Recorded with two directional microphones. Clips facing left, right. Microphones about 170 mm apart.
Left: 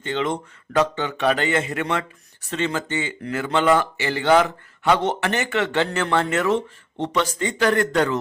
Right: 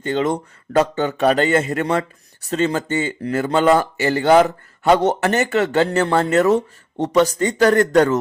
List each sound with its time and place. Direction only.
0.0 s speech: 40° right (ahead or behind)